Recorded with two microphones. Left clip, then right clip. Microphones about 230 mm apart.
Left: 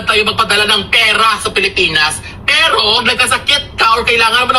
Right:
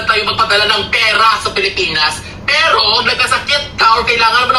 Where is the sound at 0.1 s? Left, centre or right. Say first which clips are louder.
Left 1 dB; left.